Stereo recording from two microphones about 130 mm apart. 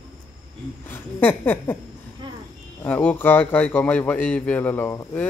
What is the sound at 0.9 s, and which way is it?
Speech, 15° left (ahead or behind).